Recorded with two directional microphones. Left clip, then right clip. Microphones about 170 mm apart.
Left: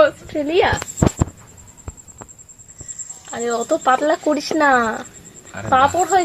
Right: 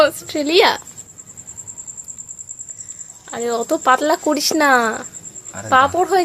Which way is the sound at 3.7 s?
15° right (ahead or behind).